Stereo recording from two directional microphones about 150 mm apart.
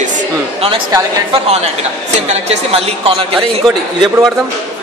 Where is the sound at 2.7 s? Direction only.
40° right (ahead or behind).